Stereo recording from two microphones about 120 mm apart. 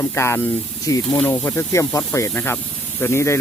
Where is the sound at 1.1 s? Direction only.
15° left (ahead or behind).